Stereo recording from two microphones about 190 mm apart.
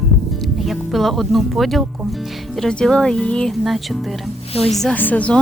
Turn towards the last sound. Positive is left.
turn(degrees=5)  # may be behind; listen again after turning